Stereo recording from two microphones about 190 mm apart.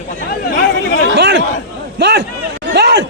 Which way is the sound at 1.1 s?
65° right (ahead or behind).